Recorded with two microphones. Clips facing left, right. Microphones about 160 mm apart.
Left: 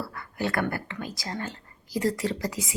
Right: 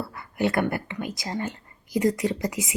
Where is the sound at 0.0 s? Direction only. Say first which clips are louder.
Right 4 dB; 20° right (ahead or behind).